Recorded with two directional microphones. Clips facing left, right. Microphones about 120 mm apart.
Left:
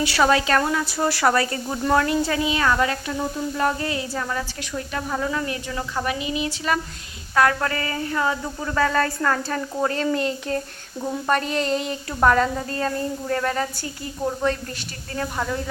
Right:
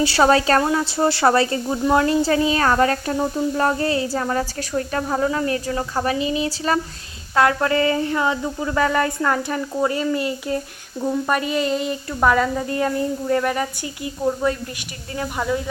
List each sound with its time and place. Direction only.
0.0 s a woman's voice: 30° right (ahead or behind)
1.6 s speech: 10° right (ahead or behind)
2.0 s speech: 30° right (ahead or behind)
3.2 s a woman's voice: 30° right (ahead or behind); by 12.6 s 5° right (ahead or behind)
12.6 s a woman's voice: 15° right (ahead or behind)